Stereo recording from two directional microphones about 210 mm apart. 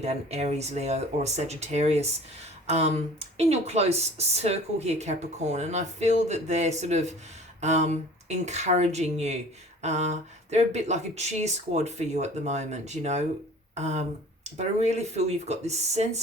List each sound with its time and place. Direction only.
0.0 s speech: 30° right (ahead or behind)